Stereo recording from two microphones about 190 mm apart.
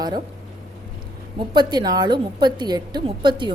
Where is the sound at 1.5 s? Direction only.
20° right (ahead or behind).